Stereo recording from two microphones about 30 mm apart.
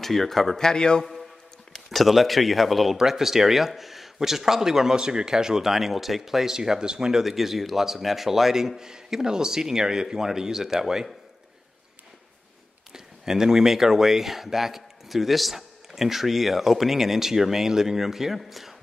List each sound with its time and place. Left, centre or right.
0.0 s speech: centre
0.6 s a man's voice: left
1.9 s speech: centre
3.0 s speech: centre
7.2 s speech: centre
12.9 s speech: centre